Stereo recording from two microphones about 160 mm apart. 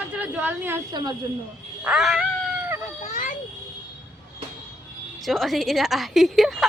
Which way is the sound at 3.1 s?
55° left (ahead or behind).